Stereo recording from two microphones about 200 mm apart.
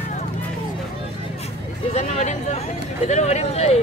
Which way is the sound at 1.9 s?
35° left (ahead or behind).